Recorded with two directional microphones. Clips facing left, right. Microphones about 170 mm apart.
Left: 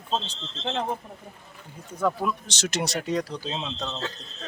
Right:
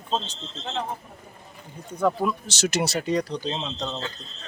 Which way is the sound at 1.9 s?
Centre (ahead or behind).